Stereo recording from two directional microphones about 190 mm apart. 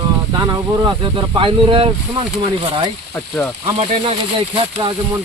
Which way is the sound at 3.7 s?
30° right (ahead or behind).